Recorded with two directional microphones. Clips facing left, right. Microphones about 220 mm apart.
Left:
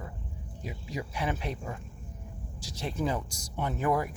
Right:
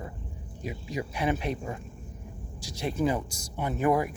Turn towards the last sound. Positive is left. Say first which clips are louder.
# right 3 dB
turn(degrees=-15)  # may be behind; listen again after turning